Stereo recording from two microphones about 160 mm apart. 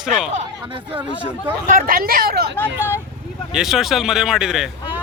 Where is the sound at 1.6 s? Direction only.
60° right (ahead or behind).